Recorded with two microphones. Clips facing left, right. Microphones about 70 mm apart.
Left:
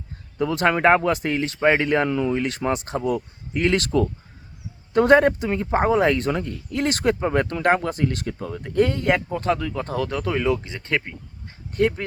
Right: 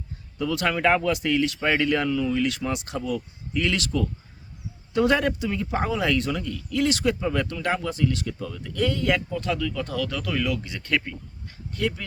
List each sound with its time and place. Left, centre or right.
0.3 s speech: left